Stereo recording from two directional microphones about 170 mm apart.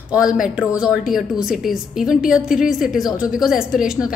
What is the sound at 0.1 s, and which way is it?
A woman's voice, 5° right (ahead or behind).